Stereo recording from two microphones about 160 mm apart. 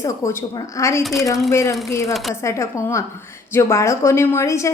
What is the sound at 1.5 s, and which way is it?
Speech, 15° left (ahead or behind).